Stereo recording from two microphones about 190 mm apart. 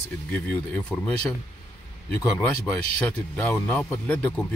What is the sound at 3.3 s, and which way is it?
Speech, 10° left (ahead or behind).